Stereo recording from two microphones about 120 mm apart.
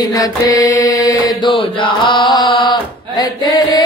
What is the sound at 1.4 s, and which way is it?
Chant, 45° left (ahead or behind).